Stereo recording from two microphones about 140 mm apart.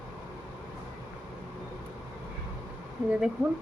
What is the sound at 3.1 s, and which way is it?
Speech, 5° right (ahead or behind).